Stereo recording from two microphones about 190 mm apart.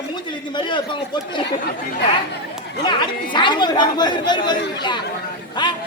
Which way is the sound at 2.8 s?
25° left (ahead or behind).